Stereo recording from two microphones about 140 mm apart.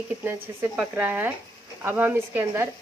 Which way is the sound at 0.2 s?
15° right (ahead or behind).